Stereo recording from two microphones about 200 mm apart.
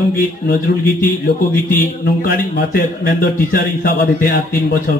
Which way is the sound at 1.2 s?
50° left (ahead or behind).